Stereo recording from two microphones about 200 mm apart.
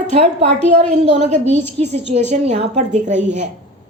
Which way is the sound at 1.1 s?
35° right (ahead or behind).